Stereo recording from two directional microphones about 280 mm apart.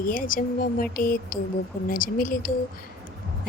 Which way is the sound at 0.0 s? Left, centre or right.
Left.